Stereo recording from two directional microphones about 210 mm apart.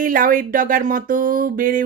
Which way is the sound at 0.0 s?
40° right (ahead or behind).